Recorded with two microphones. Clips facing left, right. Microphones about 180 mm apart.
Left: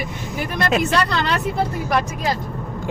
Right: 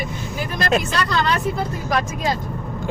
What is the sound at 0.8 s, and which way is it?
Speech, 65° left (ahead or behind).